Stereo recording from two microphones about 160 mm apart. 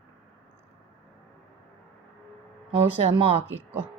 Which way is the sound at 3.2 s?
40° right (ahead or behind).